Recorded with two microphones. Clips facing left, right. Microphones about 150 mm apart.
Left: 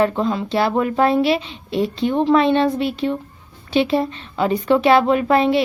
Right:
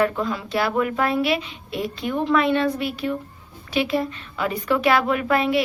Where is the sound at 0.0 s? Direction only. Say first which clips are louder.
Left 4 dB; 25° left (ahead or behind).